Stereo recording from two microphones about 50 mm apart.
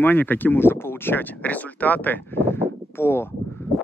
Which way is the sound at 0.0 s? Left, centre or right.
Left.